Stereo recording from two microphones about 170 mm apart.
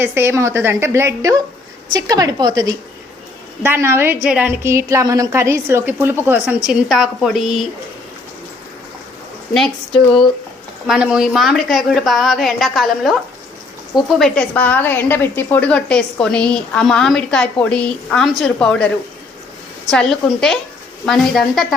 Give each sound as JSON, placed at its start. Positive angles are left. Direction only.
{"t": 0.0, "sound": "a woman's voice", "side_deg": -15}
{"t": 10.8, "sound": "a woman's voice", "side_deg": -5}
{"t": 14.2, "sound": "a woman's voice", "side_deg": 5}
{"t": 19.9, "sound": "a woman's voice", "side_deg": 5}